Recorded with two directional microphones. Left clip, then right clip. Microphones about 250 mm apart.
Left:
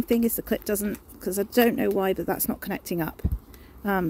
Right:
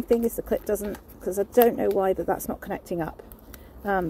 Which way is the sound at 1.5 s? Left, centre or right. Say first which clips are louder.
Right 2 dB; left.